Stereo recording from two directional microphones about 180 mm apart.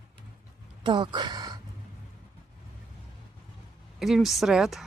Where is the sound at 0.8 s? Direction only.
25° right (ahead or behind).